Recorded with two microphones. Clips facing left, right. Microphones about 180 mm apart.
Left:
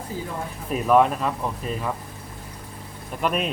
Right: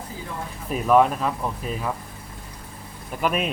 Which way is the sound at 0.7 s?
Centre (ahead or behind).